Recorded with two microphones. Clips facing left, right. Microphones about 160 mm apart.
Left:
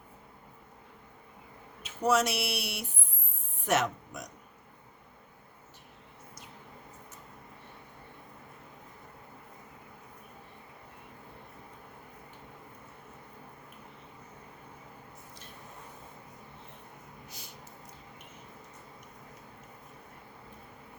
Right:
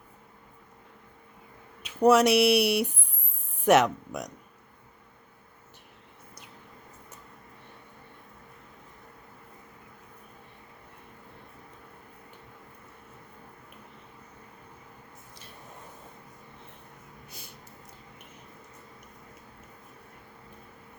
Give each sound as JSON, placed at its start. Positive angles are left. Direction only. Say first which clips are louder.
{"t": 1.8, "sound": "speech", "louder": "right 7 dB", "side_deg": -60}